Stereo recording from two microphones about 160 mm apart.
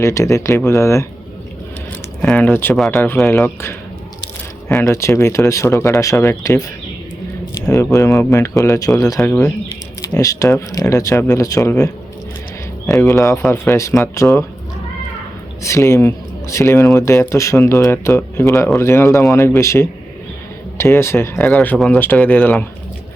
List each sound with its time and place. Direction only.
0.0 s speech: 20° left (ahead or behind)
2.2 s speech: 10° left (ahead or behind)
4.8 s speech: 15° left (ahead or behind)
7.7 s speech: 20° left (ahead or behind)
12.9 s speech: 20° left (ahead or behind)
15.6 s speech: 20° left (ahead or behind)